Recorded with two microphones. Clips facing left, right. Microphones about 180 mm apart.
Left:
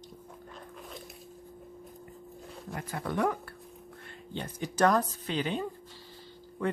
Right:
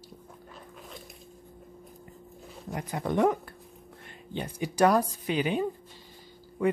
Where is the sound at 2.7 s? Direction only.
20° right (ahead or behind).